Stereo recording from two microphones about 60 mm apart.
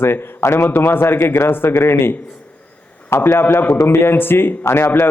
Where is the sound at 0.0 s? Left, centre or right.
Left.